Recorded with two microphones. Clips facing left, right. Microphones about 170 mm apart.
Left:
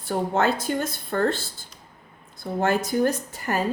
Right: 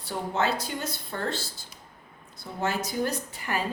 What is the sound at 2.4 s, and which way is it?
Speech, 50° left (ahead or behind).